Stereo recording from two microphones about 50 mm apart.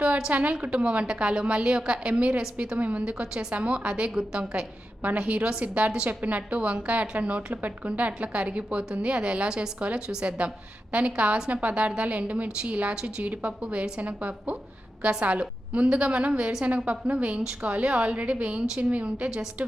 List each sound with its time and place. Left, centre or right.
0.3 s a woman's voice: right
3.0 s a woman's voice: centre
12.9 s a woman's voice: centre
13.2 s a woman's voice: right